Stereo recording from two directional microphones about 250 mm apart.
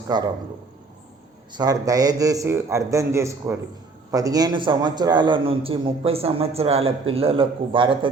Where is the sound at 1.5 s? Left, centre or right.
Centre.